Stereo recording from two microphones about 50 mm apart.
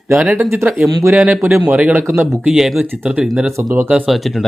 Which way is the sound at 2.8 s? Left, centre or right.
Right.